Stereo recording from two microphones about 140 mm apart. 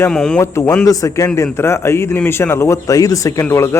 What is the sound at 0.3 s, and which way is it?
A man's voice, 15° left (ahead or behind).